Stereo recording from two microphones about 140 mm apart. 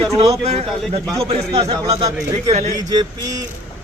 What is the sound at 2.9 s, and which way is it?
Speech, 30° right (ahead or behind).